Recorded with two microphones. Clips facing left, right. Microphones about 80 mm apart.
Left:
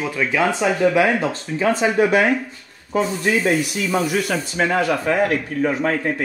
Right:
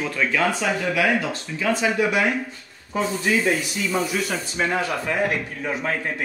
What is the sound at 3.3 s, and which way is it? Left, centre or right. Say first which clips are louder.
A man's voice: left 2 dB; left.